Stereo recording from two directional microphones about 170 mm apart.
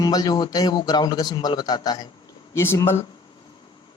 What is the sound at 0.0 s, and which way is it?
A man's voice, 20° left (ahead or behind).